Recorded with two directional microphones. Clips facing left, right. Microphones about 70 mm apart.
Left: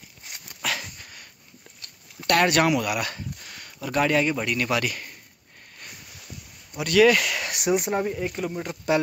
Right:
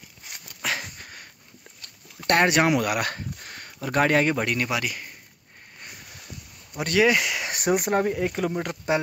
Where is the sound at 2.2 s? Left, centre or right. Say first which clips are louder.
Even; right.